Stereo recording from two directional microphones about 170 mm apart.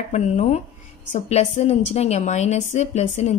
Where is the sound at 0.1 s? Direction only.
40° left (ahead or behind).